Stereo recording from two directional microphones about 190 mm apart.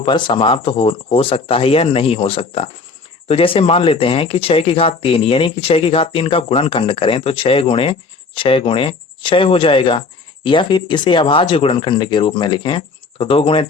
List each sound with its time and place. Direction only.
0.0 s speech: 25° left (ahead or behind)